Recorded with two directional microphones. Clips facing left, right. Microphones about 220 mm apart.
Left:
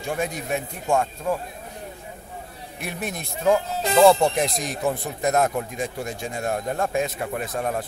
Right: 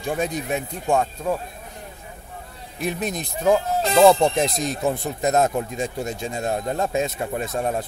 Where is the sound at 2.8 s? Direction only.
20° right (ahead or behind).